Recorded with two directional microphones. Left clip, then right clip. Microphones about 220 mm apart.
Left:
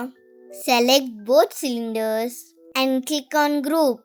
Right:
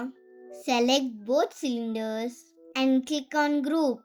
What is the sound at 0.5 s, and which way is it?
A child's voice, 45° left (ahead or behind).